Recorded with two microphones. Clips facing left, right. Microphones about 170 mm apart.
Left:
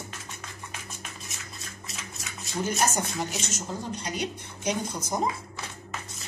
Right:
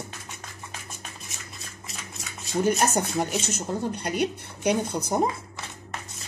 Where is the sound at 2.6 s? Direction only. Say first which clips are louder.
Right 5 dB; 55° right (ahead or behind).